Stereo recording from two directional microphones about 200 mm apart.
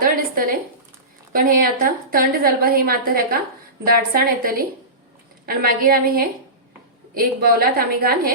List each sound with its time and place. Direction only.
1.3 s a woman's voice: 45° right (ahead or behind)